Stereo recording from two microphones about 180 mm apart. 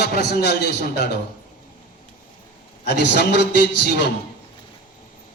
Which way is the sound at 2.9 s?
70° left (ahead or behind).